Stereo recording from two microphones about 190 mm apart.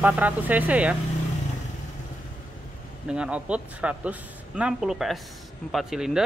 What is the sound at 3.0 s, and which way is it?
Speech, 5° right (ahead or behind).